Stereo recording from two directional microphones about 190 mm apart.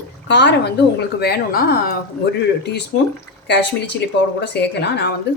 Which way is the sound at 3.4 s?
65° left (ahead or behind).